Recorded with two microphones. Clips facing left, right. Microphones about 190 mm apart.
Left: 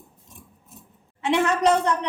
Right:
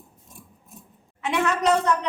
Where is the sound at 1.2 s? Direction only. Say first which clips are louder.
Left 3 dB; 30° left (ahead or behind).